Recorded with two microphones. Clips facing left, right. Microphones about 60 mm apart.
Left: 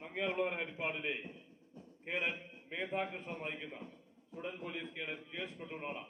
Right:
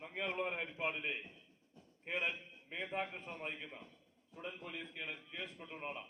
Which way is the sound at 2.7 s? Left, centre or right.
Left.